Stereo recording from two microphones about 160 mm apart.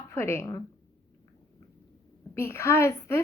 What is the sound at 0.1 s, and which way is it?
Speech, 15° left (ahead or behind).